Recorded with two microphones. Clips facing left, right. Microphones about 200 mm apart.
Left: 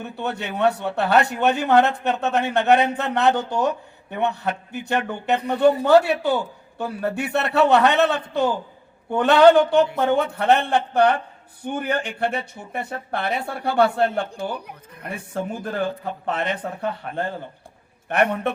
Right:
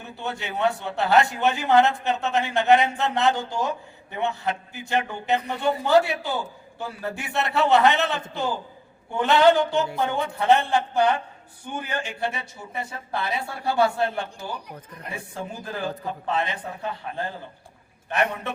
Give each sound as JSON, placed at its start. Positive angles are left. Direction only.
{"t": 0.0, "sound": "a man's voice", "side_deg": 60}